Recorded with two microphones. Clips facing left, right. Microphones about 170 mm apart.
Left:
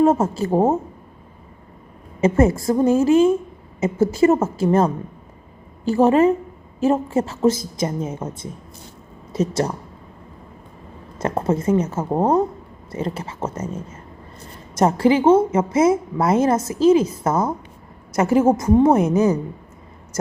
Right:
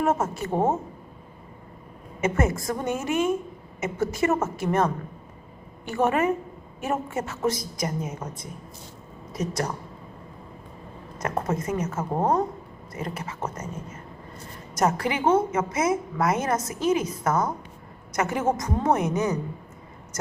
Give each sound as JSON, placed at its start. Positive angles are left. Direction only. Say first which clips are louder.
{"t": 0.0, "sound": "a woman's voice", "louder": "left 8 dB", "side_deg": 30}
{"t": 2.2, "sound": "a woman's voice", "louder": "left 8 dB", "side_deg": 30}
{"t": 11.2, "sound": "a woman's voice", "louder": "left 6 dB", "side_deg": 30}
{"t": 14.8, "sound": "a woman's voice", "louder": "left 8 dB", "side_deg": 30}